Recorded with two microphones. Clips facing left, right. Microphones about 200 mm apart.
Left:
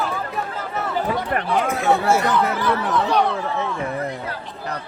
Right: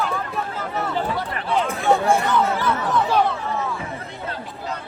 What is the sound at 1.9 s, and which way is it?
Chatter, centre (ahead or behind).